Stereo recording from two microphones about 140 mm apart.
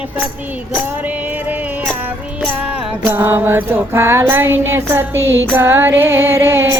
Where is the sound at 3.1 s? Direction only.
15° right (ahead or behind).